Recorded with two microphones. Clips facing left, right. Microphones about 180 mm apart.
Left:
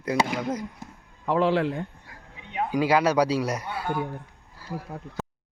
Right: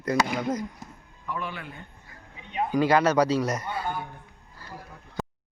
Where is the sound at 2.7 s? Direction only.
10° left (ahead or behind).